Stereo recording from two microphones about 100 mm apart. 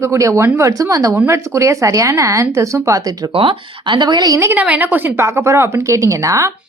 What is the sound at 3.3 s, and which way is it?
Speech, 60° right (ahead or behind).